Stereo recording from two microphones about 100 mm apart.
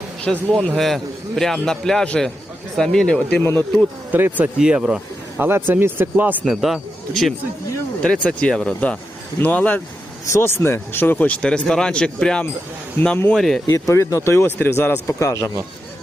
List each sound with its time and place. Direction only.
0.3 s a man's voice: 5° left (ahead or behind)
3.4 s speech: 20° left (ahead or behind)
4.1 s speech: 20° right (ahead or behind)
4.5 s speech: 5° right (ahead or behind)
5.4 s speech: 20° right (ahead or behind)
6.4 s a man's voice: centre (ahead or behind); by 9.8 s 15° left (ahead or behind)
10.2 s a man's voice: 25° left (ahead or behind); by 13.6 s 5° left (ahead or behind)
13.7 s speech: 30° left (ahead or behind)
15.0 s a man's voice: 30° left (ahead or behind)